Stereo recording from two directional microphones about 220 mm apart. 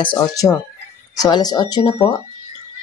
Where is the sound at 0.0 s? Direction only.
20° left (ahead or behind).